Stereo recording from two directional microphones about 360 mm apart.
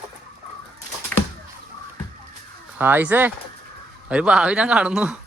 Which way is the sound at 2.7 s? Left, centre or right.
Centre.